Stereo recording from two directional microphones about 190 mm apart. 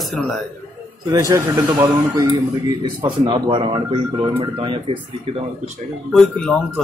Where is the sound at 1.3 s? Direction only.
15° right (ahead or behind).